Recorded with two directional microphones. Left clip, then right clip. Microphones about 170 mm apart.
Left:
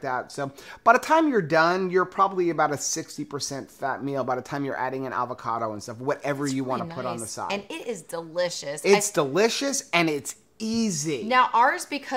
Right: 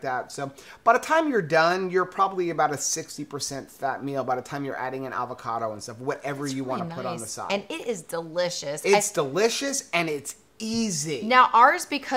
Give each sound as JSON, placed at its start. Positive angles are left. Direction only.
{"t": 0.0, "sound": "speech", "side_deg": 30}
{"t": 7.4, "sound": "a woman's voice", "side_deg": -15}
{"t": 9.0, "sound": "speech", "side_deg": 40}
{"t": 10.6, "sound": "speech", "side_deg": 25}
{"t": 11.2, "sound": "a woman's voice", "side_deg": -10}